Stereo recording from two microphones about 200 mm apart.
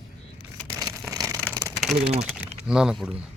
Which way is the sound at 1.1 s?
15° right (ahead or behind).